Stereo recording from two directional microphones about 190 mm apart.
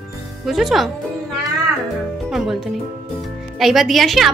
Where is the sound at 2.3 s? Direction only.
Centre (ahead or behind).